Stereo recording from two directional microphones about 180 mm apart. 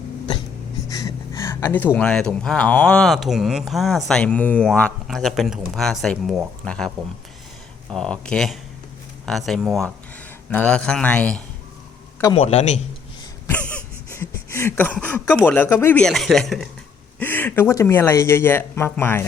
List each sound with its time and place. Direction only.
0.9 s speech: 20° left (ahead or behind); by 6.9 s 5° left (ahead or behind)
7.9 s speech: 5° left (ahead or behind)
12.4 s a man's voice: 35° left (ahead or behind)
13.5 s a sound: 10° left (ahead or behind)
15.4 s speech: 10° left (ahead or behind)